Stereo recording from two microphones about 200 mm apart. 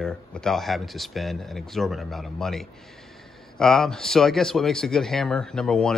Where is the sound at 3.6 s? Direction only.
Centre (ahead or behind).